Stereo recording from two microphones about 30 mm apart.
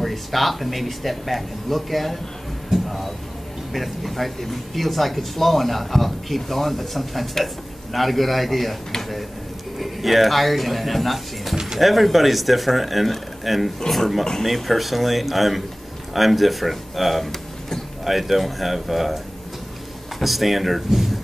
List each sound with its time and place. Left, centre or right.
0.0 s speech: centre
2.7 s a sound: centre
3.7 s speech: centre
9.8 s speech: centre
20.2 s speech: centre